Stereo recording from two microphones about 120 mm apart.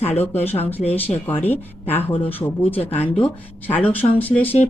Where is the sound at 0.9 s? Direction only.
15° left (ahead or behind).